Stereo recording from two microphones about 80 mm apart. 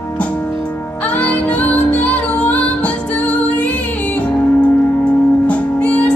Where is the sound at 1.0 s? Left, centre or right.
Centre.